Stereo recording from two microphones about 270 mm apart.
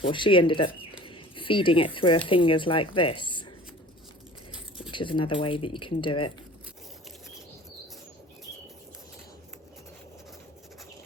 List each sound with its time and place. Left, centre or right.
0.0 s speech: centre
4.9 s speech: centre